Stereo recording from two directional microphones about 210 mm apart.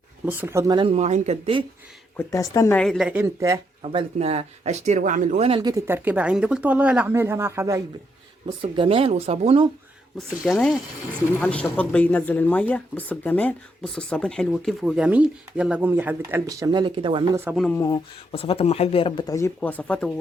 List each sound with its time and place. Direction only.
0.3 s speech: 10° right (ahead or behind)
0.9 s speech: 35° right (ahead or behind)
2.1 s speech: 15° left (ahead or behind); by 4.0 s 15° right (ahead or behind)
4.2 s speech: 30° right (ahead or behind); by 7.8 s 10° right (ahead or behind)
8.6 s speech: 25° right (ahead or behind)
10.2 s speech: centre (ahead or behind); by 17.2 s 25° right (ahead or behind)
17.3 s speech: 10° right (ahead or behind)
17.7 s speech: 20° left (ahead or behind)